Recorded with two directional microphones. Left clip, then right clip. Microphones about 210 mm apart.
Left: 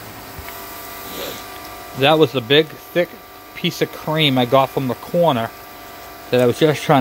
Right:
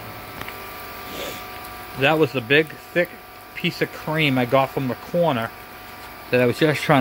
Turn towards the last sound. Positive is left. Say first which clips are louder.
# left 3 dB
turn(degrees=10)  # may be behind; listen again after turning